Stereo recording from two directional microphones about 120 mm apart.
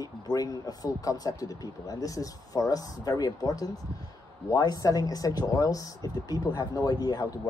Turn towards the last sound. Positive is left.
turn(degrees=30)  # may be behind; listen again after turning